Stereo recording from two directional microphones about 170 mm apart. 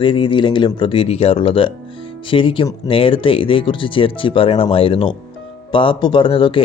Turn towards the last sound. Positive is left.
turn(degrees=30)  # may be behind; listen again after turning